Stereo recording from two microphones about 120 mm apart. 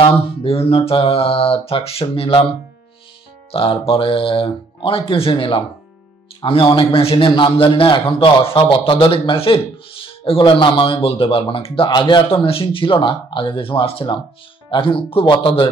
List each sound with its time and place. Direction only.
0.0 s a man's voice: 50° left (ahead or behind)
3.5 s a man's voice: 50° left (ahead or behind)
7.2 s a man's voice: 40° left (ahead or behind)